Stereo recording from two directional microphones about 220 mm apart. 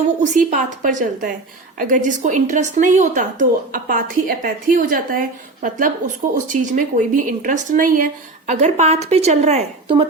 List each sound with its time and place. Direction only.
0.2 s speech: 35° right (ahead or behind)
6.5 s speech: 35° right (ahead or behind)